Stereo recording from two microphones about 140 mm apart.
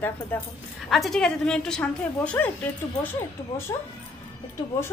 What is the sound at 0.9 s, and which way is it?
A woman's voice, centre (ahead or behind).